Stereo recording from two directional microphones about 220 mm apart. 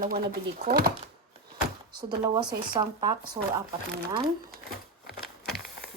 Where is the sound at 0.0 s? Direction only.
40° right (ahead or behind).